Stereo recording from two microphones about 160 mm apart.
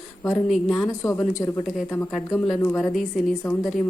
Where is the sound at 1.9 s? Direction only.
Centre (ahead or behind).